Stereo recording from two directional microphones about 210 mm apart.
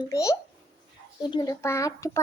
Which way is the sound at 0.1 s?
15° left (ahead or behind).